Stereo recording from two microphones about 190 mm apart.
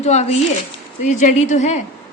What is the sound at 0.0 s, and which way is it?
A woman's voice, 35° left (ahead or behind).